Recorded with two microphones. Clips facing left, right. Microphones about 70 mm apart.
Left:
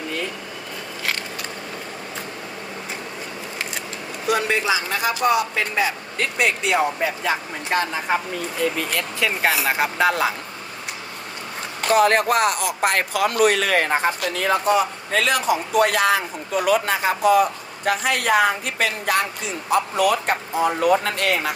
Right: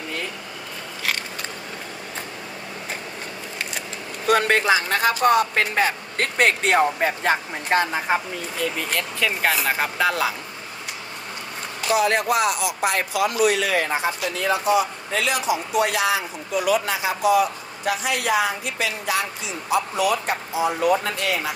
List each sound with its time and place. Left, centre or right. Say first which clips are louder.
4.3 s speech: right 3 dB; right
7.7 s a woman's voice: right 2 dB; centre
8.9 s speech: left 1 dB; centre
10.0 s speech: left 2 dB; left
11.8 s speech: left 4 dB; left